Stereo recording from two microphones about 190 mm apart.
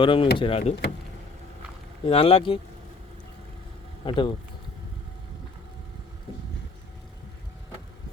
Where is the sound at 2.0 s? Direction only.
30° left (ahead or behind).